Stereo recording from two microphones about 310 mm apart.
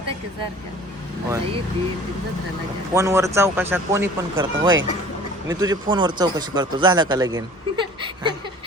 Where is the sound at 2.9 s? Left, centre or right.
Centre.